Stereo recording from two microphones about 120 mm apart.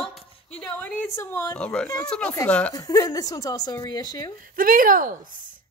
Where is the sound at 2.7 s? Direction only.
30° left (ahead or behind).